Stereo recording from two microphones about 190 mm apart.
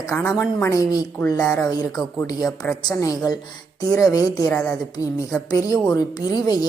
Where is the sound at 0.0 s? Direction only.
15° left (ahead or behind).